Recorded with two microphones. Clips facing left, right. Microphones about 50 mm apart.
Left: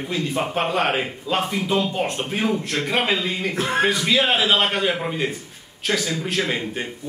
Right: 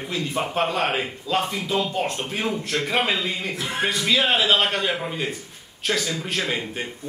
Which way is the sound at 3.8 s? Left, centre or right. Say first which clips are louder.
Even; centre.